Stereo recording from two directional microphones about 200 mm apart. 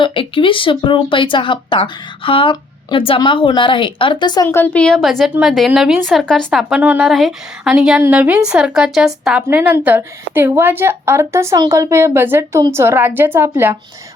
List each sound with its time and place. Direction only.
0.0 s speech: 25° left (ahead or behind)
4.4 s a woman's voice: 10° left (ahead or behind); by 13.7 s 10° right (ahead or behind)